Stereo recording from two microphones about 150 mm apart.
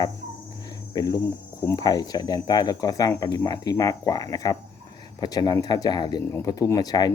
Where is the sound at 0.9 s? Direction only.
25° left (ahead or behind).